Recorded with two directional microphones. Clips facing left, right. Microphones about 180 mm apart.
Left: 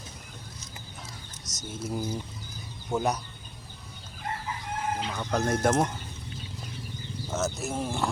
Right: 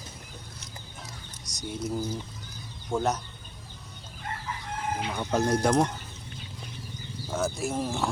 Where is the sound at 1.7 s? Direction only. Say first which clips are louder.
Right 1 dB; 5° left (ahead or behind).